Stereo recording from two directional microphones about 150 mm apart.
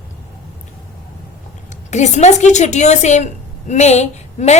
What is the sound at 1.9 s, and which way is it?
Speech, 50° left (ahead or behind).